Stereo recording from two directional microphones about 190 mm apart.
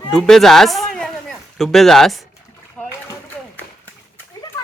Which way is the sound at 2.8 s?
15° left (ahead or behind).